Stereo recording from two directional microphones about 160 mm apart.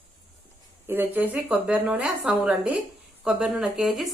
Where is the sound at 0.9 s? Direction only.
10° right (ahead or behind).